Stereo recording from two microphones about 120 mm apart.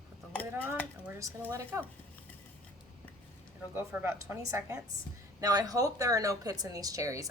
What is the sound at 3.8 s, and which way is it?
Speech, 20° right (ahead or behind).